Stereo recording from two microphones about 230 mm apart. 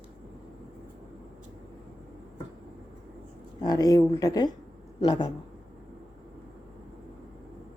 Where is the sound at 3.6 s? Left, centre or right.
Centre.